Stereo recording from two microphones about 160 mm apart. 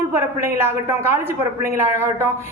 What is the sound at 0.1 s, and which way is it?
Speech, 15° right (ahead or behind).